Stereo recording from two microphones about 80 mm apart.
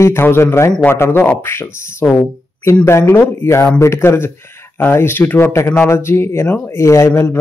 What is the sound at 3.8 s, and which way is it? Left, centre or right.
Speech, left.